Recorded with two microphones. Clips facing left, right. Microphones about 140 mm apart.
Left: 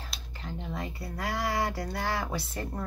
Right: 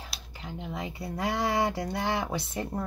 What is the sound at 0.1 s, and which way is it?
Speech, 10° right (ahead or behind).